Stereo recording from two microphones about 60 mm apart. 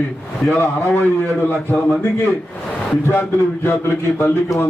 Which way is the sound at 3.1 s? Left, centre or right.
Left.